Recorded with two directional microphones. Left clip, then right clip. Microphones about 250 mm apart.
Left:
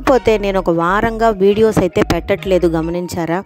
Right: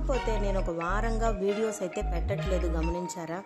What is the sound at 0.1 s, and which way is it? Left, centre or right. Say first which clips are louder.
Speech: left 17 dB; left.